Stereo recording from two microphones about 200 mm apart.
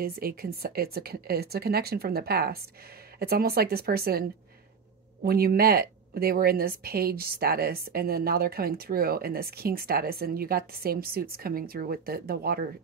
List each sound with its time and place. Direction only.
0.0 s speech: 50° right (ahead or behind)